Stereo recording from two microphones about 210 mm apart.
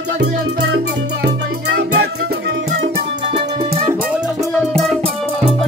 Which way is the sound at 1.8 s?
55° right (ahead or behind).